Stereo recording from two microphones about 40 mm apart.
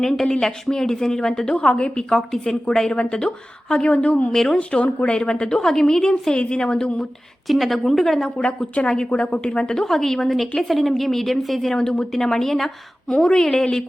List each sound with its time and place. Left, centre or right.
0.0 s a woman's voice: centre
3.9 s a woman's voice: left
4.3 s a woman's voice: centre
4.5 s a woman's voice: left; by 6.1 s centre
6.3 s a woman's voice: left
7.4 s speech: centre
8.4 s a woman's voice: left
8.9 s a woman's voice: centre
9.8 s a woman's voice: centre
11.7 s a woman's voice: centre